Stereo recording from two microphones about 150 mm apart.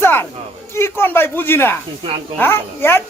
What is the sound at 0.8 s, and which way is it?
Speech, 15° left (ahead or behind).